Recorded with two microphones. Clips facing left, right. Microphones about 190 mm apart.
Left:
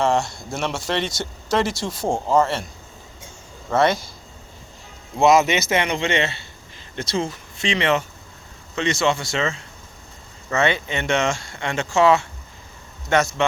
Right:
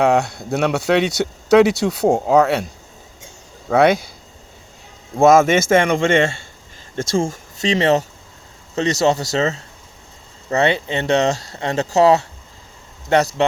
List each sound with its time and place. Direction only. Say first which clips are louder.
0.0 s speech: right 4 dB; 60° right (ahead or behind)
2.0 s speech: right 7 dB; 40° right (ahead or behind)
2.3 s speech: right 3 dB; 70° right (ahead or behind)
3.7 s speech: right 5 dB; 60° right (ahead or behind)
5.1 s a man's voice: right 4 dB; 50° right (ahead or behind); by 13.4 s 35° right (ahead or behind)